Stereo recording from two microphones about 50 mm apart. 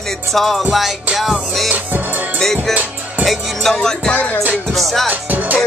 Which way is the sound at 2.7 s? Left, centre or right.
Right.